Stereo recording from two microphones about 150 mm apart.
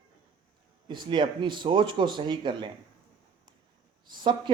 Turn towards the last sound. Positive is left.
turn(degrees=-30)  # may be behind; listen again after turning